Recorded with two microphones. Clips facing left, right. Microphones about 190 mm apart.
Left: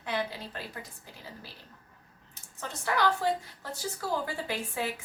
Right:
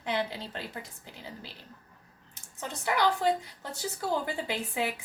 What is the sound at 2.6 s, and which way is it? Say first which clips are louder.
A woman's voice: right 1 dB; 15° right (ahead or behind).